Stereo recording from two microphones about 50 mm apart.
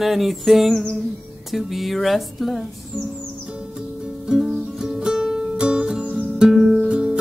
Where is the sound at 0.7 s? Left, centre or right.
Centre.